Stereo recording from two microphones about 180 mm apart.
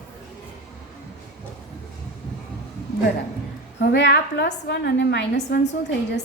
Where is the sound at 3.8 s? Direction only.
80° left.